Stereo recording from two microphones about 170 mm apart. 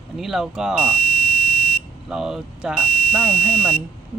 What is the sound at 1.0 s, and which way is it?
Buzzer, 55° right (ahead or behind).